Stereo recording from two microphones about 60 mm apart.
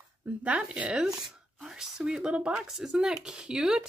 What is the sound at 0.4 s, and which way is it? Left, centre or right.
A woman's voice, centre.